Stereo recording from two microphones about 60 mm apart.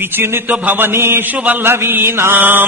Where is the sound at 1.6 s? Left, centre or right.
Right.